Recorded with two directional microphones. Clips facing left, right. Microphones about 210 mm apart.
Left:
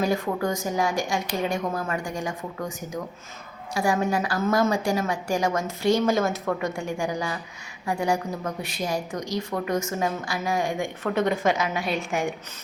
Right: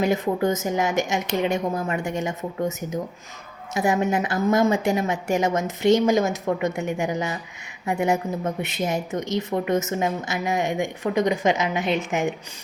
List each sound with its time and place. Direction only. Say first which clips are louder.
0.0 s a woman's voice: right 3 dB; 20° right (ahead or behind)